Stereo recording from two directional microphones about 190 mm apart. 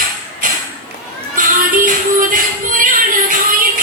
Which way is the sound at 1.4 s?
45° right (ahead or behind).